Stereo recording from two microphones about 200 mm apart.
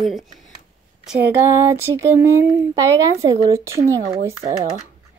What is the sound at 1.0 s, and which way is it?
Speech, 10° right (ahead or behind).